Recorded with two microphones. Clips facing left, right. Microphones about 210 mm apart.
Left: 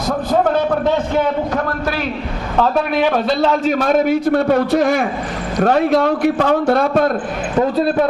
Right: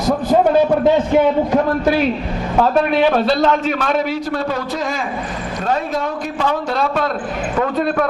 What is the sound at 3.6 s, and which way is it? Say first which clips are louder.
A man's voice: left 4 dB; 40° left (ahead or behind).